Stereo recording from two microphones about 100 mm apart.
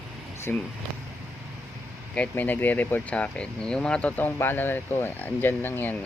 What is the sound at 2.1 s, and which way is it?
Speech, 15° left (ahead or behind).